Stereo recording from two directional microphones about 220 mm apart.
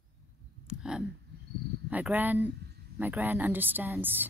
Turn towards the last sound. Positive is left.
turn(degrees=-10)  # may be behind; listen again after turning